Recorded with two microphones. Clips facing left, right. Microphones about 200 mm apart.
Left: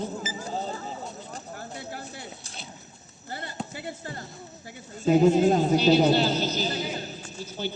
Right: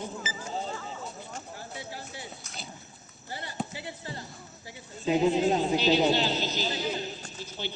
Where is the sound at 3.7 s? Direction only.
50° left (ahead or behind).